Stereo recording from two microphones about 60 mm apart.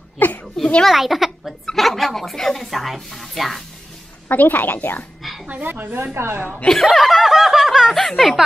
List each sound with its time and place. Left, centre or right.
0.2 s a sound: left
0.8 s speech: centre
4.3 s a woman's voice: left
5.2 s dog: centre
5.5 s speech: right
6.1 s a woman's voice: right
6.7 s speech: centre